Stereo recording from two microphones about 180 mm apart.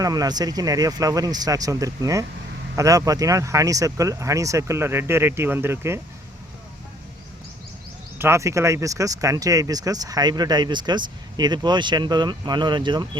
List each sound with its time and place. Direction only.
0.0 s speech: 20° right (ahead or behind)
8.2 s speech: 15° right (ahead or behind)